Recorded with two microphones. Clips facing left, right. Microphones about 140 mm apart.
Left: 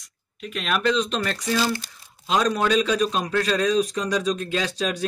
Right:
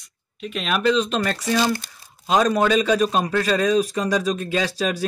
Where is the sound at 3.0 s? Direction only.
50° right (ahead or behind).